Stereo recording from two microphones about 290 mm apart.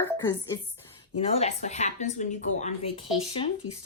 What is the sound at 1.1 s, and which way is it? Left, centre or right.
Speech, left.